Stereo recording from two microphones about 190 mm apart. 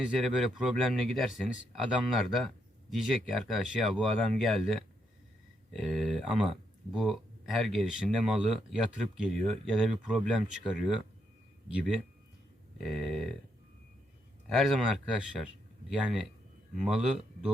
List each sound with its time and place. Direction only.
0.2 s speech: centre (ahead or behind)
14.5 s speech: centre (ahead or behind)
16.7 s speech: 5° right (ahead or behind)